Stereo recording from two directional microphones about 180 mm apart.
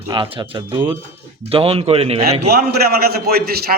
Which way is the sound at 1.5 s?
30° right (ahead or behind).